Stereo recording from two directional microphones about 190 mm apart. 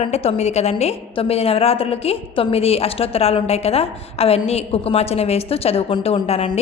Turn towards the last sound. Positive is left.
turn(degrees=30)  # may be behind; listen again after turning